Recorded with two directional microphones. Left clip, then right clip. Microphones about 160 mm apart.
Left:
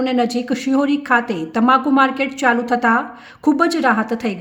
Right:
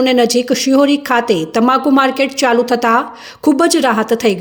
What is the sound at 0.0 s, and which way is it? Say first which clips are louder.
A woman's voice: right 7 dB; 10° right (ahead or behind).